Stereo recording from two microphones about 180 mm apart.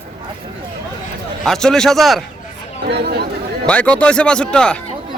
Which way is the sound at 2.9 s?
65° right (ahead or behind).